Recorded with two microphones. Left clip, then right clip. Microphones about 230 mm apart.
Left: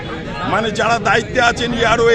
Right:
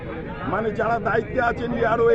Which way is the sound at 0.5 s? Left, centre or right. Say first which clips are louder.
Left 7 dB; centre.